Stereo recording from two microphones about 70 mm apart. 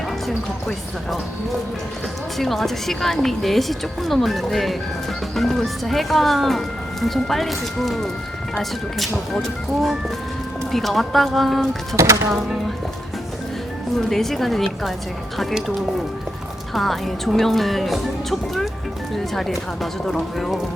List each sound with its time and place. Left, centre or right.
0.3 s speech: centre
12.0 s speech: right
12.3 s speech: centre
14.1 s speech: centre
16.7 s speech: centre